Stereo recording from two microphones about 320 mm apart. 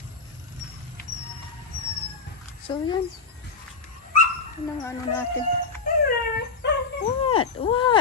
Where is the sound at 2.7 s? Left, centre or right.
Centre.